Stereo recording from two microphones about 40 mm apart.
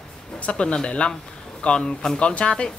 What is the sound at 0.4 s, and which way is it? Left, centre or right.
Speech, left.